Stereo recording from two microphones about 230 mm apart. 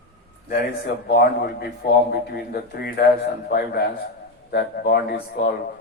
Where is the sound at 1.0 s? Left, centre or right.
Left.